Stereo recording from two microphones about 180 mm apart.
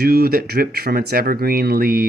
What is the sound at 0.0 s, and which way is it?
Speech, 60° right (ahead or behind).